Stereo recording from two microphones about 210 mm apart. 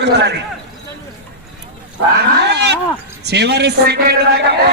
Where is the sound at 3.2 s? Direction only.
50° right (ahead or behind).